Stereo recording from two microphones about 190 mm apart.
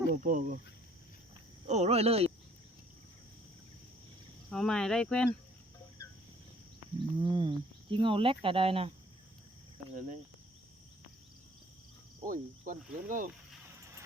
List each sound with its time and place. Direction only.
0.1 s cricket: 45° right (ahead or behind)
1.6 s speech: 35° right (ahead or behind)
4.4 s speech: centre (ahead or behind)
7.2 s speech: 25° right (ahead or behind)
9.9 s cricket: 45° right (ahead or behind)
12.2 s cricket: 45° right (ahead or behind)